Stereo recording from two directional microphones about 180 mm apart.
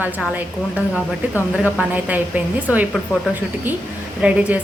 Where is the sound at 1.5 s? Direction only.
5° right (ahead or behind).